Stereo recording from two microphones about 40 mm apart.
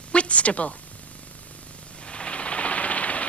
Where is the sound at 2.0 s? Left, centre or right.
Left.